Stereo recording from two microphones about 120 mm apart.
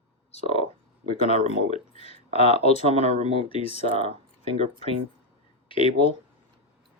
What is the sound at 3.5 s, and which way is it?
Speech, 55° left (ahead or behind).